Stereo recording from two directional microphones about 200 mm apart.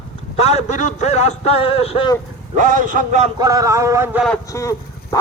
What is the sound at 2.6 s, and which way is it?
Speech, 40° right (ahead or behind).